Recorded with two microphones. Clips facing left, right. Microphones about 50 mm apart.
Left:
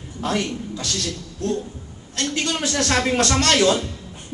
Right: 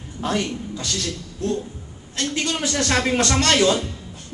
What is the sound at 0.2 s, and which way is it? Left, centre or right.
Speech, centre.